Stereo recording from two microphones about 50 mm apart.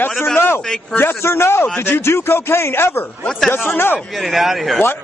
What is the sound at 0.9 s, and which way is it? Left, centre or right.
A man's voice, left.